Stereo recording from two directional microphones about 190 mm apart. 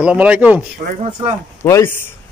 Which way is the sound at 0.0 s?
5° right (ahead or behind).